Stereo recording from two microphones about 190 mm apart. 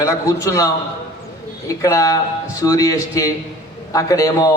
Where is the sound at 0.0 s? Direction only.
15° left (ahead or behind).